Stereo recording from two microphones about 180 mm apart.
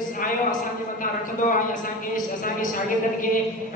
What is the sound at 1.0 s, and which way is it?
A man's voice, 50° left (ahead or behind).